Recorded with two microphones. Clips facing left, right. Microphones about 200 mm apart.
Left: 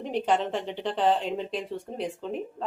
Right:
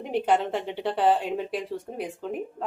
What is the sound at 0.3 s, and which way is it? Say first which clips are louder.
Speech: right 2 dB; 10° right (ahead or behind).